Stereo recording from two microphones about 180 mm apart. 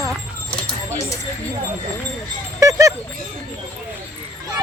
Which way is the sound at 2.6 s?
20° right (ahead or behind).